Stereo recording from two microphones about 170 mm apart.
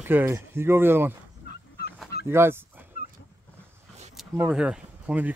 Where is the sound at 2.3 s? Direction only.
15° right (ahead or behind).